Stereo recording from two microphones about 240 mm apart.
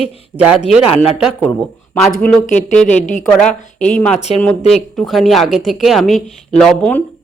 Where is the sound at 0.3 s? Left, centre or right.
Right.